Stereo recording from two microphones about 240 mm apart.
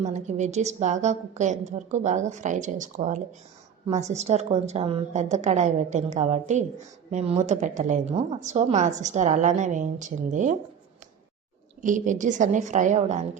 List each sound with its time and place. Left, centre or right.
0.0 s a woman's voice: right
11.8 s a woman's voice: right